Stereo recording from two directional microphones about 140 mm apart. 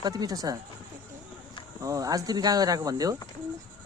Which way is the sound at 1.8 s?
25° right (ahead or behind).